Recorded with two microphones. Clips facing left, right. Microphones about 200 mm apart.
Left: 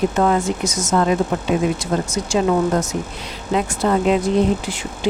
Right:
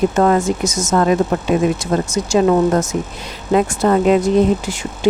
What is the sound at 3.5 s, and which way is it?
Speech, 50° right (ahead or behind).